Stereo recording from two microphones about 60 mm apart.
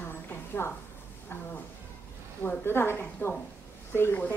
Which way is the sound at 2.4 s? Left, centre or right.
Left.